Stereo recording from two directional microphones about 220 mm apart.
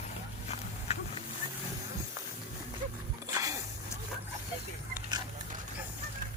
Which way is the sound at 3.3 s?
15° right (ahead or behind).